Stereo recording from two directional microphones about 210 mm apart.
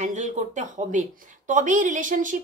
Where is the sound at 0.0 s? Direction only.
35° right (ahead or behind).